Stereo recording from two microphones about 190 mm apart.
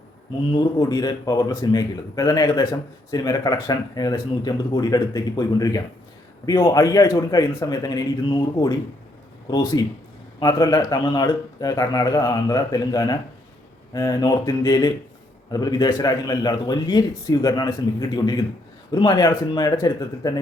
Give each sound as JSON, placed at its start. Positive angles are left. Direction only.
{"t": 0.5, "sound": "a man's voice", "side_deg": 20}